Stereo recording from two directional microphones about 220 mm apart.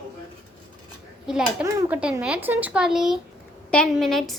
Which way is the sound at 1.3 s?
5° right (ahead or behind).